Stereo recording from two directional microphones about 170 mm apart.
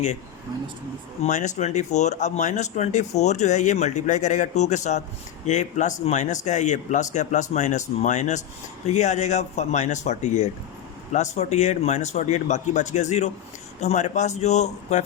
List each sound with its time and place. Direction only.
1.2 s speech: 45° left (ahead or behind)